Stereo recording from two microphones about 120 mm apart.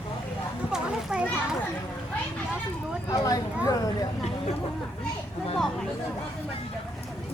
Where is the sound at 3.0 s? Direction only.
30° left (ahead or behind).